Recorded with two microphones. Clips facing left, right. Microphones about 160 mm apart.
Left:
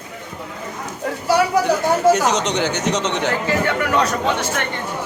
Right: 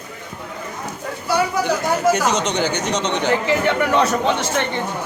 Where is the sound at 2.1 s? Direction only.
Centre (ahead or behind).